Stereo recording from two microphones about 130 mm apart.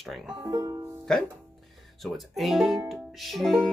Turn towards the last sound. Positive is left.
turn(degrees=0)  # may be behind; listen again after turning